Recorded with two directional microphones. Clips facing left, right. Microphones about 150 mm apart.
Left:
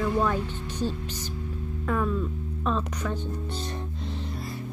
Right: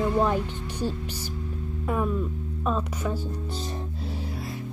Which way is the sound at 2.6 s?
10° right (ahead or behind).